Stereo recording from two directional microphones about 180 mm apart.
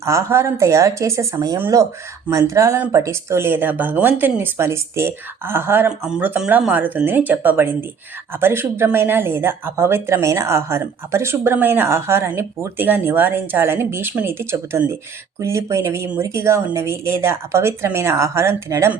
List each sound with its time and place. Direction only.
0.0 s speech: 15° right (ahead or behind)